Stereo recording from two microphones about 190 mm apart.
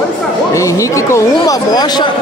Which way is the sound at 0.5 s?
15° left (ahead or behind).